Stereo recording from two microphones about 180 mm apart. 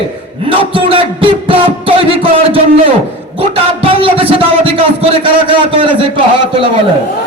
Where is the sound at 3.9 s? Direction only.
30° right (ahead or behind).